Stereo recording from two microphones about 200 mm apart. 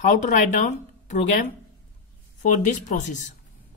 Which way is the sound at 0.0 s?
40° left (ahead or behind).